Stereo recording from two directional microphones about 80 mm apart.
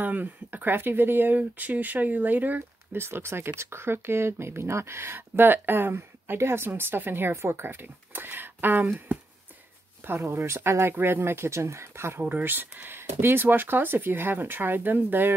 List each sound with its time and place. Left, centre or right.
0.0 s speech: right
10.0 s speech: right
12.2 s speech: right